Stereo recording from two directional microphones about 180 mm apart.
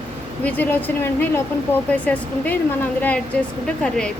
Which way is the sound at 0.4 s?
10° left (ahead or behind).